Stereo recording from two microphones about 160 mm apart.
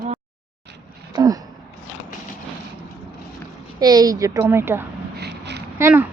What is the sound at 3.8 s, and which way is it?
A woman's voice, 25° right (ahead or behind).